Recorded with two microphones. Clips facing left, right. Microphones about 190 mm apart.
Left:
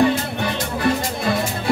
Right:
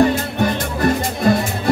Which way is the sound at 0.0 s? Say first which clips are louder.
Right 3 dB; 45° right (ahead or behind).